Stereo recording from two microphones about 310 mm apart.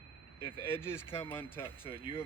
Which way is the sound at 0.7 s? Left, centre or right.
Centre.